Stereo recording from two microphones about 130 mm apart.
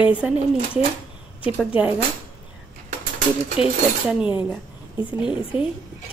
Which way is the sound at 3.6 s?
5° right (ahead or behind).